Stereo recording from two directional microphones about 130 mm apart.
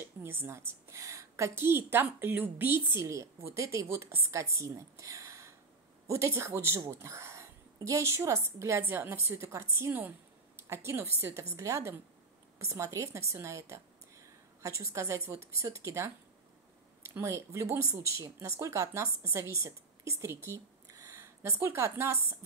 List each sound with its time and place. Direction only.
0.2 s a woman's voice: 20° right (ahead or behind)